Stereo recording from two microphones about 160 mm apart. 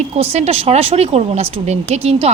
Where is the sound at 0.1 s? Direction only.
40° right (ahead or behind).